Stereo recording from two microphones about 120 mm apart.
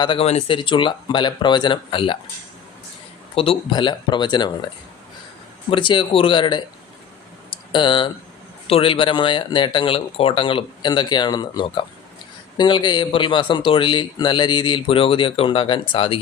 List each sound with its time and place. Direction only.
0.2 s speech: 60° left (ahead or behind)
0.5 s a man's voice: 45° left (ahead or behind)
3.3 s speech: 50° left (ahead or behind)
5.7 s speech: 40° left (ahead or behind)
7.5 s a sound: 40° left (ahead or behind)
8.6 s a man's voice: 50° left (ahead or behind)